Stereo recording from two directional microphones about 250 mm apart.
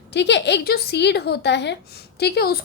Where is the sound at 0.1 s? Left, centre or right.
Left.